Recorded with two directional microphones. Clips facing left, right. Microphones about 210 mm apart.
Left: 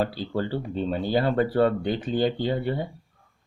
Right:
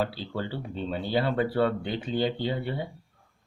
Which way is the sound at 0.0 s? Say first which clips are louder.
Left 4 dB; 45° left (ahead or behind).